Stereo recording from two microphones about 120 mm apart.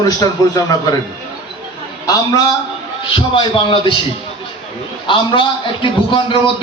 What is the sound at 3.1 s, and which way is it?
Speech, 45° left (ahead or behind).